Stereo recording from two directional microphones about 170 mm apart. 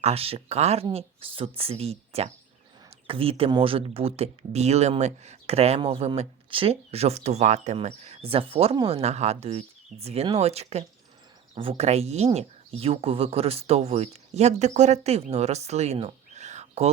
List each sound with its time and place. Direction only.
0.0 s speech: 35° right (ahead or behind)